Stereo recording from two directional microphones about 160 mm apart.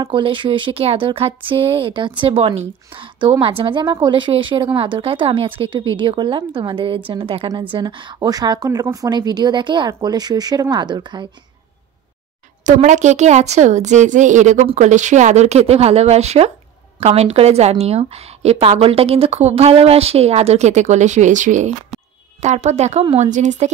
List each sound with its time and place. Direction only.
0.0 s a woman's voice: 30° right (ahead or behind)
12.6 s a woman's voice: 50° right (ahead or behind)